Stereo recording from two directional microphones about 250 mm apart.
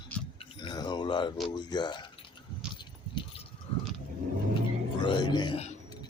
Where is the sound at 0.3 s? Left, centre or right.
Centre.